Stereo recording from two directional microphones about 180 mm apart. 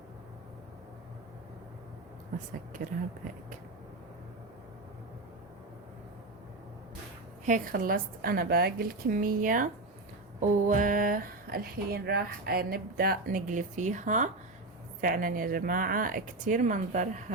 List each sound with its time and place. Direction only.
2.8 s speech: 55° right (ahead or behind)
7.4 s speech: 50° right (ahead or behind)